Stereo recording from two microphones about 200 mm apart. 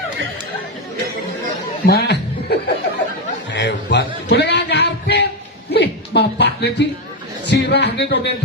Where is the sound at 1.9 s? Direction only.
55° left (ahead or behind).